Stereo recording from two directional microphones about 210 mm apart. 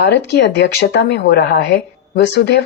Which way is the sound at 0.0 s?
55° left (ahead or behind).